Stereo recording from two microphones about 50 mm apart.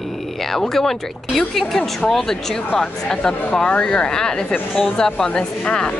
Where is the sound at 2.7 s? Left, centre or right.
Centre.